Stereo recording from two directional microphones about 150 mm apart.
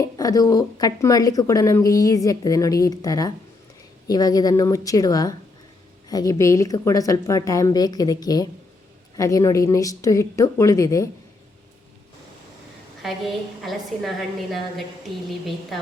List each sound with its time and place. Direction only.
0.0 s a woman's voice: 25° left (ahead or behind)
13.0 s a woman's voice: centre (ahead or behind)